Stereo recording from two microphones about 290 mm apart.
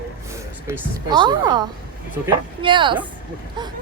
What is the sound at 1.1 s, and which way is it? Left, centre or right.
Speech, centre.